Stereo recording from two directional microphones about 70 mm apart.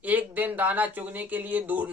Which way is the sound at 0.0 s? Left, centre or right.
Right.